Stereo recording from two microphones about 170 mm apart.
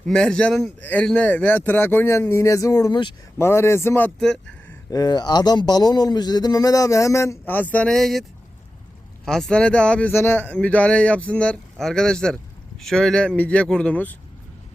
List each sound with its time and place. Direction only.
0.0 s speech: 5° left (ahead or behind); by 3.2 s 25° left (ahead or behind)
3.3 s speech: 15° left (ahead or behind)
4.9 s speech: 25° left (ahead or behind); by 8.2 s centre (ahead or behind)
9.2 s speech: 5° left (ahead or behind)